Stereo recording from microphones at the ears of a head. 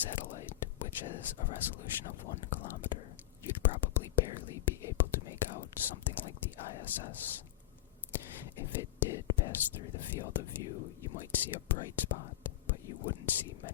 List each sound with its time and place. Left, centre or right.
0.0 s speech: left